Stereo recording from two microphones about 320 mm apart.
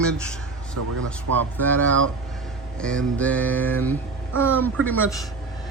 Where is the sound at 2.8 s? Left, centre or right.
Centre.